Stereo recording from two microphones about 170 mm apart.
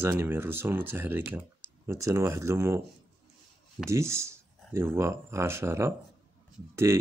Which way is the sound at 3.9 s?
15° right (ahead or behind).